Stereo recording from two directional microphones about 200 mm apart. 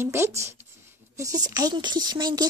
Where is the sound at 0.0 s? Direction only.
10° right (ahead or behind).